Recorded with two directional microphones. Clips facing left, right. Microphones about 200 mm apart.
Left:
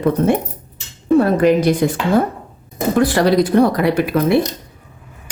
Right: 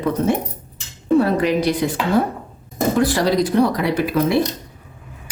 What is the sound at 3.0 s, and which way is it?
A woman's voice, 55° left (ahead or behind).